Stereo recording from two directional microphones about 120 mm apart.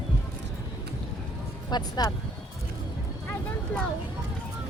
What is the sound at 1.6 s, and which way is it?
Speech, 35° left (ahead or behind).